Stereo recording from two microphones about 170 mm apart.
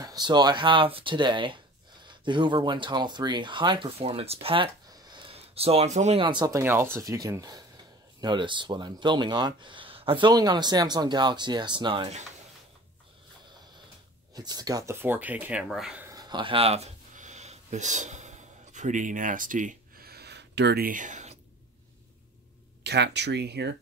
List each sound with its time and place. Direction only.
0.0 s speech: 25° right (ahead or behind)
14.3 s speech: 25° right (ahead or behind); by 16.1 s 5° right (ahead or behind)
16.1 s a sound: 25° right (ahead or behind); by 21.4 s 45° right (ahead or behind)
22.8 s speech: 80° right